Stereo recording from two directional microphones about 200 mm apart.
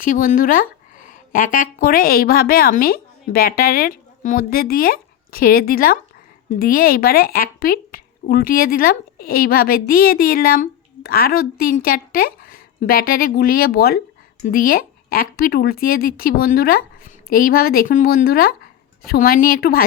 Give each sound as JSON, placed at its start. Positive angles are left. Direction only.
{"t": 0.0, "sound": "speech", "side_deg": 45}